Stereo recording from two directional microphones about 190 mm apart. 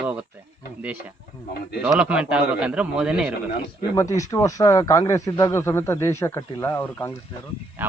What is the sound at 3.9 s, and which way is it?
Speech, 15° left (ahead or behind).